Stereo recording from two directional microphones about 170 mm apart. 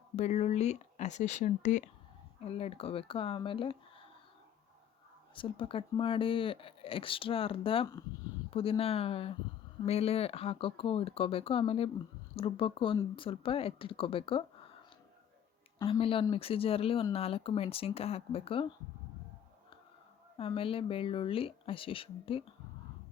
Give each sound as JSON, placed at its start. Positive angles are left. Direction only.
{"t": 0.2, "sound": "speech", "side_deg": 40}
{"t": 5.3, "sound": "speech", "side_deg": 30}
{"t": 15.8, "sound": "speech", "side_deg": 35}
{"t": 20.3, "sound": "speech", "side_deg": 30}